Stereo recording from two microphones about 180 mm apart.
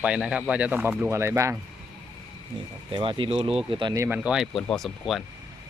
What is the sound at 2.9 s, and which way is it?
Speech, 30° right (ahead or behind).